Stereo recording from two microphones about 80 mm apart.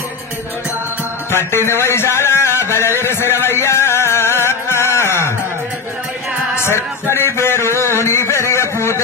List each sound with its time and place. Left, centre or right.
1.3 s speech: left
2.6 s music: left
6.5 s a sound: left